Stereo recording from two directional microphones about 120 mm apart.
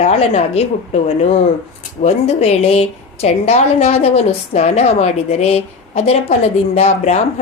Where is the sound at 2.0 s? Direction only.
65° left (ahead or behind).